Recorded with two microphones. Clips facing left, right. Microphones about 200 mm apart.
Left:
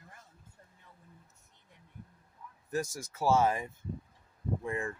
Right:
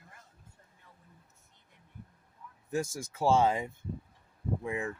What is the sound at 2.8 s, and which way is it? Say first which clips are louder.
Speech: right 2 dB; 25° right (ahead or behind).